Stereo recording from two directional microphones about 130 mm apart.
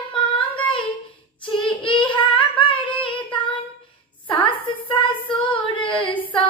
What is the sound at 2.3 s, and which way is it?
Singing, 40° left (ahead or behind).